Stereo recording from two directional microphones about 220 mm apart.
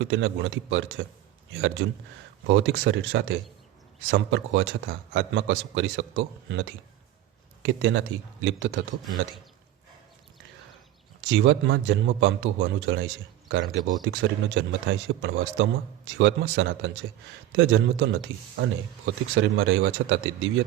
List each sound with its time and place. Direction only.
0.0 s a man's voice: 55° right (ahead or behind)
11.3 s a man's voice: 55° right (ahead or behind)